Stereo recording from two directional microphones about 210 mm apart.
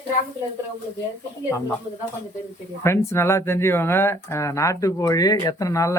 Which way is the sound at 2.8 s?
15° left (ahead or behind).